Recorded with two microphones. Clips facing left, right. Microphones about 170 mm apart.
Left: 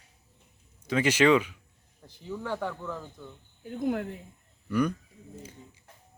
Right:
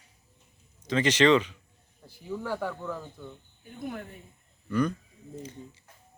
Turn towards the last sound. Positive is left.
turn(degrees=10)  # may be behind; listen again after turning